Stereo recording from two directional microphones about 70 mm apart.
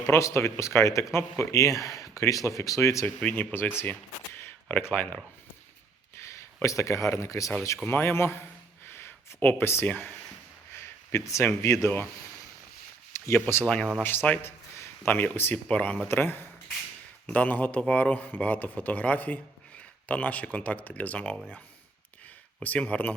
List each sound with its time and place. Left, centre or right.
0.0 s speech: left
3.2 s speech: left
3.5 s speech: left
6.2 s speech: left
7.9 s speech: left
10.8 s a sound: left
11.6 s speech: left
13.1 s a sound: left
14.0 s speech: left
16.0 s speech: left
22.6 s speech: left